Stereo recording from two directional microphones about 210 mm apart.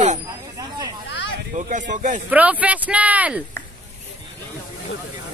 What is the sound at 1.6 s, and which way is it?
Speech, 35° right (ahead or behind).